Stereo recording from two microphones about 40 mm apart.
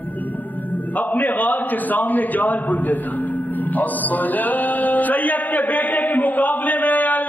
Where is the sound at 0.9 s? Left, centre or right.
Left.